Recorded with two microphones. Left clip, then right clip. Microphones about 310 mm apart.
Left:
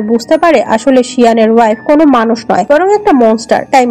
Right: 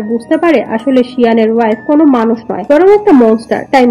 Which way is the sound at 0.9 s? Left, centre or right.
Left.